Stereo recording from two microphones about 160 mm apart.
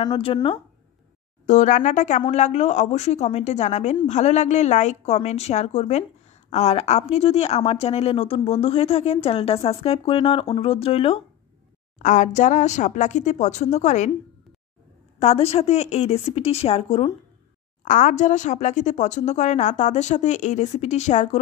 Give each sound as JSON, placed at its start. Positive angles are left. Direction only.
{"t": 0.0, "sound": "speech", "side_deg": 30}
{"t": 1.4, "sound": "a woman's voice", "side_deg": 50}
{"t": 12.0, "sound": "a woman's voice", "side_deg": 50}
{"t": 15.1, "sound": "speech", "side_deg": 40}
{"t": 17.8, "sound": "a woman's voice", "side_deg": 55}